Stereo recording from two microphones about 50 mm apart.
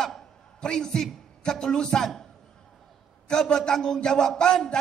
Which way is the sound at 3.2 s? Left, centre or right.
Centre.